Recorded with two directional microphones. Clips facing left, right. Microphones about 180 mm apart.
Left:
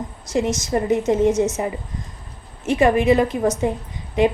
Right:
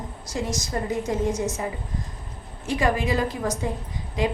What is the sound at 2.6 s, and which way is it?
A woman's voice, 25° left (ahead or behind).